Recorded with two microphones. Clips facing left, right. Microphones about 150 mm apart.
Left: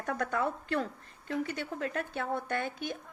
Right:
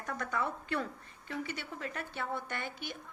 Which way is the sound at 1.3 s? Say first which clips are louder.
Left 6 dB; 45° left (ahead or behind).